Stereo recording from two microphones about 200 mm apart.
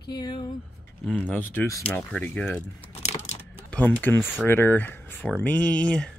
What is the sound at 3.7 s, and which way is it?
Speech, 10° left (ahead or behind).